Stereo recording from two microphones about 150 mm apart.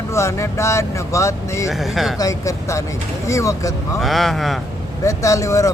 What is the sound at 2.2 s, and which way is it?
Speech, 20° left (ahead or behind).